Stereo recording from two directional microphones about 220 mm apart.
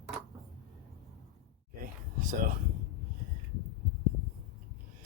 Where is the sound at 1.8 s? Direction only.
40° right (ahead or behind).